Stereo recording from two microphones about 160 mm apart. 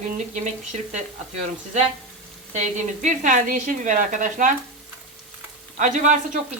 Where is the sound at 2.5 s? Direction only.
50° right (ahead or behind).